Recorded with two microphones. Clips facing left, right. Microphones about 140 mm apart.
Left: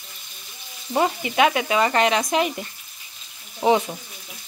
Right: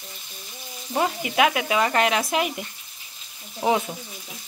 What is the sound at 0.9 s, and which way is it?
Speech, centre (ahead or behind).